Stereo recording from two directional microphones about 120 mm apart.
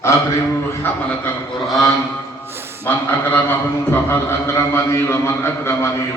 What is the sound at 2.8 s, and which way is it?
A man's voice, 15° left (ahead or behind).